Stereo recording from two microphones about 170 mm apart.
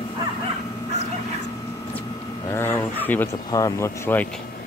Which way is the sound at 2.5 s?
15° left (ahead or behind).